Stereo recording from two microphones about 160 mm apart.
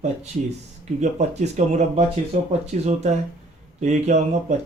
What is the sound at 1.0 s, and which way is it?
Speech, 45° right (ahead or behind).